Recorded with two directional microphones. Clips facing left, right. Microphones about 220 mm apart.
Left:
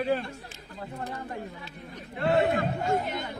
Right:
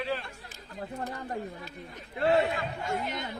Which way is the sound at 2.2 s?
50° left (ahead or behind).